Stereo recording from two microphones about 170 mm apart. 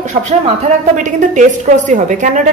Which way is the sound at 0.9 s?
45° right (ahead or behind).